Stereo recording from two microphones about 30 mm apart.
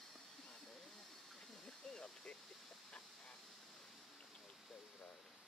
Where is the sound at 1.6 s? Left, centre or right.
Left.